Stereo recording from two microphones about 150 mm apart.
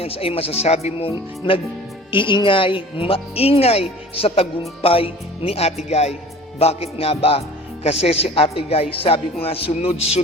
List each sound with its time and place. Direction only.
0.0 s speech: 40° left (ahead or behind)